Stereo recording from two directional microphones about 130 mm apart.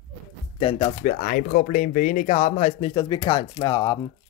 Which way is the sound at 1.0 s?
85° left.